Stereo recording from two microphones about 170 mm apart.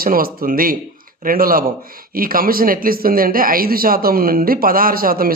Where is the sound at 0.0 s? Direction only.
60° right (ahead or behind).